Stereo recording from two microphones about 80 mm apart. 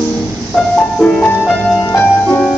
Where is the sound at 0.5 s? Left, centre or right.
Centre.